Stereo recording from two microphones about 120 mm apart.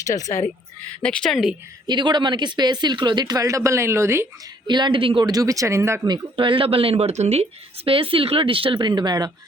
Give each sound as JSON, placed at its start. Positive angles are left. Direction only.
{"t": 0.0, "sound": "speech", "side_deg": 25}
{"t": 1.0, "sound": "speech", "side_deg": 5}
{"t": 1.9, "sound": "speech", "side_deg": -40}
{"t": 4.6, "sound": "speech", "side_deg": -40}
{"t": 5.3, "sound": "speech", "side_deg": -30}
{"t": 6.1, "sound": "speech", "side_deg": -45}
{"t": 7.9, "sound": "speech", "side_deg": -50}